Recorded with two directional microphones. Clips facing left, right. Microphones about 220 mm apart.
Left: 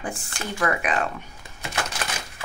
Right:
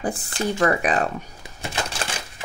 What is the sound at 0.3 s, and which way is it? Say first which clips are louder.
Speech: right 5 dB; 35° right (ahead or behind).